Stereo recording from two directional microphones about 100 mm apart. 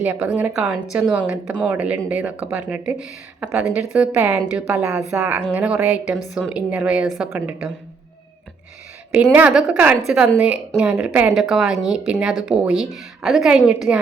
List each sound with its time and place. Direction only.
0.0 s speech: 15° right (ahead or behind)
9.3 s a woman's voice: 10° right (ahead or behind)